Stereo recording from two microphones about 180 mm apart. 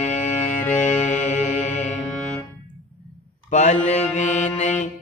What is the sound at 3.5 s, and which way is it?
Mantra, 40° left (ahead or behind).